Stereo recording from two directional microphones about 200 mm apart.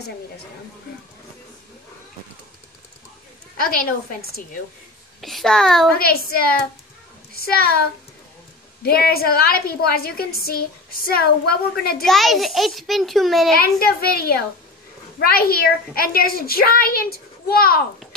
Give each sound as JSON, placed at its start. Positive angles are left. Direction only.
{"t": 3.5, "sound": "a woman's voice", "side_deg": 45}
{"t": 5.2, "sound": "a child's voice", "side_deg": 0}
{"t": 5.9, "sound": "a woman's voice", "side_deg": 50}
{"t": 8.8, "sound": "a woman's voice", "side_deg": 50}
{"t": 12.0, "sound": "a child's voice", "side_deg": 0}
{"t": 13.6, "sound": "a woman's voice", "side_deg": 50}